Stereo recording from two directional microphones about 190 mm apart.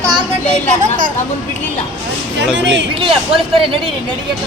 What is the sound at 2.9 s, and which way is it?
Speech, 30° right (ahead or behind).